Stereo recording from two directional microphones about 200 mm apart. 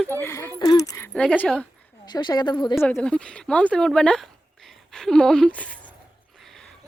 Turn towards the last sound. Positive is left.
turn(degrees=5)  # may be behind; listen again after turning